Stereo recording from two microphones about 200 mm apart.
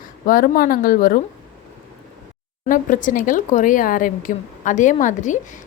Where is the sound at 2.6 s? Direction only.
40° left (ahead or behind).